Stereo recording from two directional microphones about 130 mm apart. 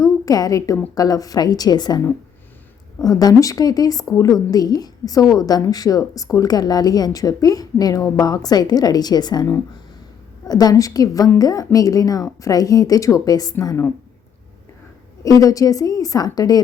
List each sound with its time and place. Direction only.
0.0 s a woman's voice: 30° left (ahead or behind)
3.0 s a woman's voice: 30° left (ahead or behind)
15.2 s a woman's voice: 25° left (ahead or behind)